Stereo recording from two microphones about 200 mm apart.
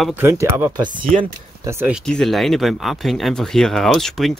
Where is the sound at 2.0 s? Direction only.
Centre (ahead or behind).